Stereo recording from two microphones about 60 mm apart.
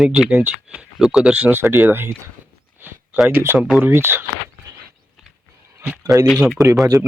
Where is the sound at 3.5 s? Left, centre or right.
Right.